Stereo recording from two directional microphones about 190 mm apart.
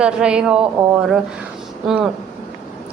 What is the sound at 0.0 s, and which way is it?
Speech, 5° right (ahead or behind).